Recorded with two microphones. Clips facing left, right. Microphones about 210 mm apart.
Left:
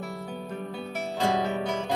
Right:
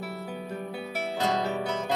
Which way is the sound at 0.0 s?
5° right (ahead or behind).